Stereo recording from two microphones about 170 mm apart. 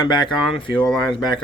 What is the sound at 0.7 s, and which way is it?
Speech, 5° left (ahead or behind).